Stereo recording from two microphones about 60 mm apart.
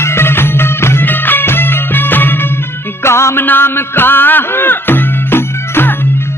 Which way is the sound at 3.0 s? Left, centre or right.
Left.